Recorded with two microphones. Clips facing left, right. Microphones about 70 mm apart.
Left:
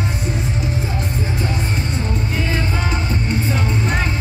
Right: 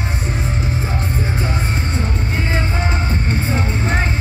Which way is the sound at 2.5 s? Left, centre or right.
Right.